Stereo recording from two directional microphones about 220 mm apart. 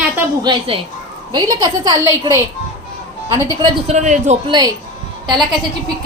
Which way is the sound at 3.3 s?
20° right (ahead or behind).